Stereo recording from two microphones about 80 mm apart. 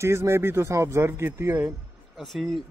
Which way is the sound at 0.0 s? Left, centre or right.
Right.